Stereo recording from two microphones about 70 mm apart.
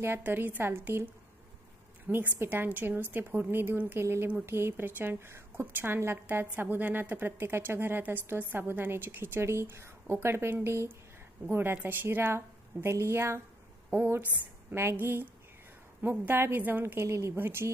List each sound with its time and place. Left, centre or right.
0.0 s a woman's voice: right
14.7 s a woman's voice: right